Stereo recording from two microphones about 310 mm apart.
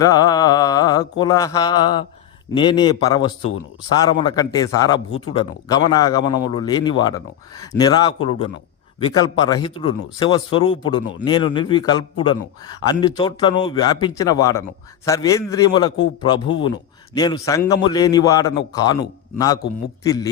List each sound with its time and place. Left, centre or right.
0.0 s mantra: centre
1.2 s a man's voice: centre
20.1 s a man's voice: centre